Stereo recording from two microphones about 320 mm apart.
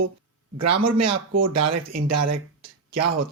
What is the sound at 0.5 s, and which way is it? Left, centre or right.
Speech, right.